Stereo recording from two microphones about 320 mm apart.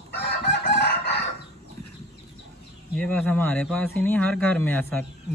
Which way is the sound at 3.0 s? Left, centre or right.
Centre.